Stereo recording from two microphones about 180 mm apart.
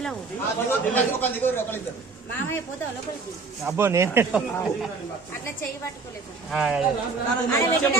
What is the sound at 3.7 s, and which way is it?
Speech, 15° right (ahead or behind).